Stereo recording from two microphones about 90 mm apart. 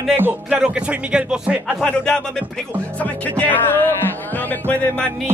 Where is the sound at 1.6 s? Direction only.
5° left (ahead or behind).